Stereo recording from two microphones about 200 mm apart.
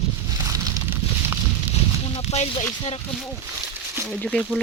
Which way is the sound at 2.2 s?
30° left (ahead or behind).